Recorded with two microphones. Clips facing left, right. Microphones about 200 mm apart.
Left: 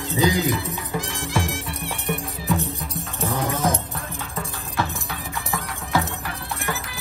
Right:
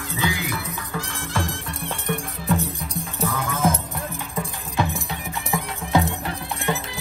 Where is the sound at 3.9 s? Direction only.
15° right (ahead or behind).